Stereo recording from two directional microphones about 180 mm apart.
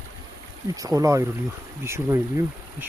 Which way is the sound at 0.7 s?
20° right (ahead or behind).